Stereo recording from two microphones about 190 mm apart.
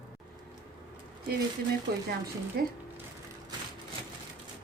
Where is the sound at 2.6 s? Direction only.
50° right (ahead or behind).